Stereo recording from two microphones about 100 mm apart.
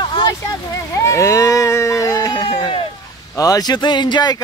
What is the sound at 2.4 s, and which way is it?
Speech, 50° left (ahead or behind).